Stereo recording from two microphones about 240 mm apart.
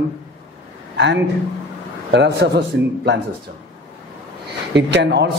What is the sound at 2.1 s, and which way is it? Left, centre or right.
A man's voice, right.